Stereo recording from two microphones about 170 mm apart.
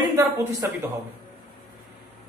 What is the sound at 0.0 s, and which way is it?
Speech, 20° right (ahead or behind).